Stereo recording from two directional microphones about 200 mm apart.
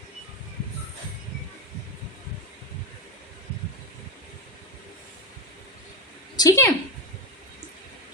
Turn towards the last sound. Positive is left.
turn(degrees=15)  # may be behind; listen again after turning